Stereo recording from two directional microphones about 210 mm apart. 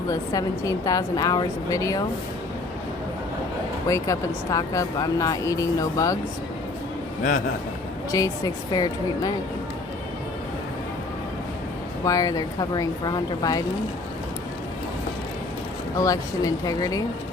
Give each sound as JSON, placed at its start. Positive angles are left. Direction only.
{"t": 0.1, "sound": "speech", "side_deg": 15}
{"t": 3.8, "sound": "speech", "side_deg": 15}
{"t": 8.1, "sound": "speech", "side_deg": 15}
{"t": 12.0, "sound": "speech", "side_deg": 15}
{"t": 16.0, "sound": "speech", "side_deg": 15}